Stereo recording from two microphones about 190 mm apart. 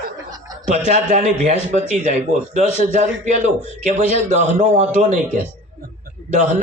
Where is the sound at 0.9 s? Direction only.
35° right (ahead or behind).